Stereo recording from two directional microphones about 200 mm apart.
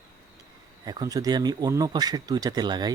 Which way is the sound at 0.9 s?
20° right (ahead or behind).